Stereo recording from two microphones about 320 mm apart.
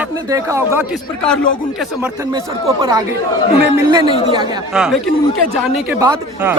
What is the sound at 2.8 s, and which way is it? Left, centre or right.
A man's voice, centre.